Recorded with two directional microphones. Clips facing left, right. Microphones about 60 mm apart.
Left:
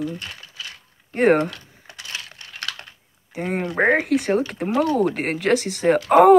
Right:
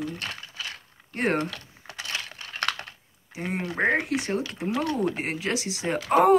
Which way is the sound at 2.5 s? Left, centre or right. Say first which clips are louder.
Right 4 dB; right.